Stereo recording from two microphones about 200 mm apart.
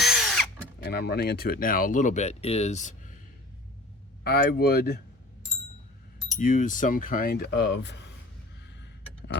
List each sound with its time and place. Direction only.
0.0 s drill: centre (ahead or behind)
0.8 s speech: 55° left (ahead or behind); by 3.1 s 35° left (ahead or behind)
4.2 s speech: 50° left (ahead or behind)
6.4 s speech: 40° left (ahead or behind); by 8.1 s 60° left (ahead or behind)